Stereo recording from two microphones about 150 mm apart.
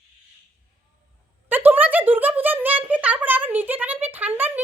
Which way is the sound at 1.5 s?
10° right (ahead or behind).